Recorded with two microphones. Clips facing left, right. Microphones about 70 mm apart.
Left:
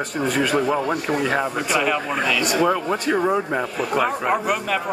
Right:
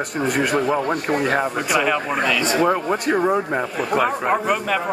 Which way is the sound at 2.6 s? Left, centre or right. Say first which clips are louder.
Right 1 dB; centre.